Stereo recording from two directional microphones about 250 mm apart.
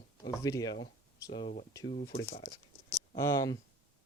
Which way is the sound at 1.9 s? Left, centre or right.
Left.